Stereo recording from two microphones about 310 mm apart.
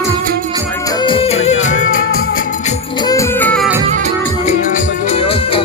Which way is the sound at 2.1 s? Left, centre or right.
Left.